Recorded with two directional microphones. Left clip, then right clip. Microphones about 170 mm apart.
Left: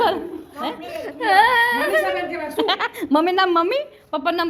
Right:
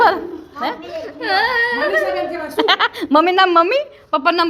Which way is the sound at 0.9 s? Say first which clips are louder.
Left 1 dB; 90° left.